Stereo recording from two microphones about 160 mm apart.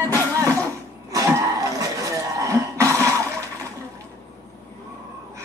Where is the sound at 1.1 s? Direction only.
20° right (ahead or behind).